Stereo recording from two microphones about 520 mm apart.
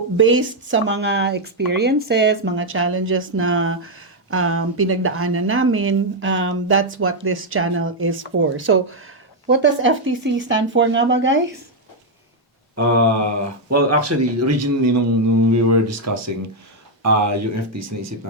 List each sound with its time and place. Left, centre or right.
0.2 s speech: right
12.7 s speech: right